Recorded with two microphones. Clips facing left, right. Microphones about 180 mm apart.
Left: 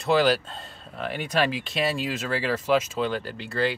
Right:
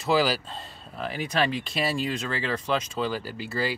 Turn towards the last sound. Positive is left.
turn(degrees=-5)  # may be behind; listen again after turning